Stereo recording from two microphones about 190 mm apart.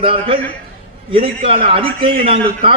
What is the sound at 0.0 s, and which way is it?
A man's voice, 30° right (ahead or behind).